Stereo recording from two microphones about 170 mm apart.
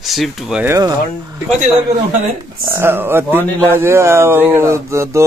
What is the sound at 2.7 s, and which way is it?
Speech, 15° right (ahead or behind).